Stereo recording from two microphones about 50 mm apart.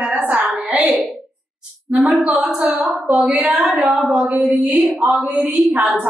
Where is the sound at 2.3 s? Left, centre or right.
Centre.